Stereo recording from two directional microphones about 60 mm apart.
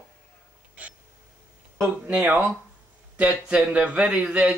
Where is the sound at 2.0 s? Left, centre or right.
Right.